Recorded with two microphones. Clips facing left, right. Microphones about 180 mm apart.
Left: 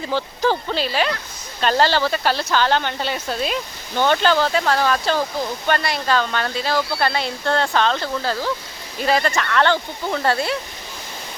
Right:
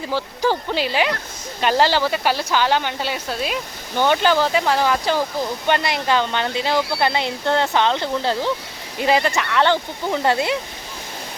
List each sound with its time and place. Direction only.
0.1 s speech: 10° right (ahead or behind)